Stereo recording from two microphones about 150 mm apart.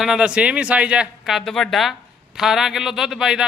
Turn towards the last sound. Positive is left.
turn(degrees=-5)  # may be behind; listen again after turning